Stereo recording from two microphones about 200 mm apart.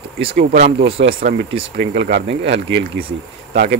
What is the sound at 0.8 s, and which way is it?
Speech, 65° right (ahead or behind).